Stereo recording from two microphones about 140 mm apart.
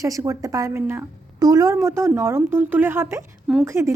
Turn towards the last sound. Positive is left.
turn(degrees=-20)  # may be behind; listen again after turning